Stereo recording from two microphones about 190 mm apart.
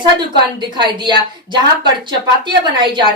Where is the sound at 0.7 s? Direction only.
25° right (ahead or behind).